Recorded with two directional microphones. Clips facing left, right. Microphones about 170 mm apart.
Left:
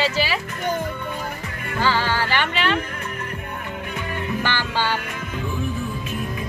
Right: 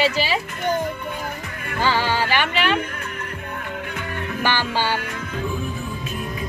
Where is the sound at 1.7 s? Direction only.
15° right (ahead or behind).